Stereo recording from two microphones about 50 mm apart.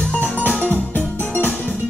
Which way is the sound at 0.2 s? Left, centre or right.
Left.